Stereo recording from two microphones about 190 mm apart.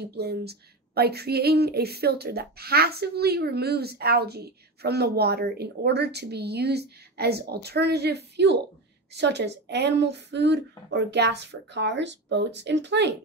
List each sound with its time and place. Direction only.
0.1 s speech: 60° right (ahead or behind)